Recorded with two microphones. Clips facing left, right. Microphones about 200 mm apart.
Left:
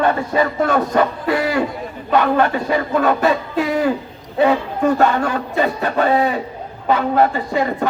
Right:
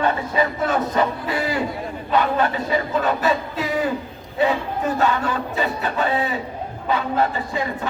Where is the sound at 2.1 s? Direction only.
50° left (ahead or behind).